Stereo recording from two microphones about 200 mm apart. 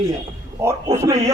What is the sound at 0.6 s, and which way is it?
Speech, 15° right (ahead or behind).